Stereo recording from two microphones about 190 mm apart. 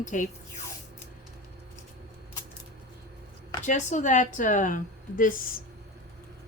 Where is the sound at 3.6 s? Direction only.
40° left (ahead or behind).